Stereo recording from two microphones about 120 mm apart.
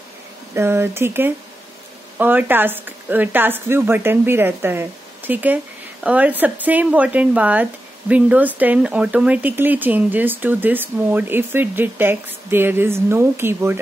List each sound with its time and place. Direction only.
0.6 s speech: 20° right (ahead or behind)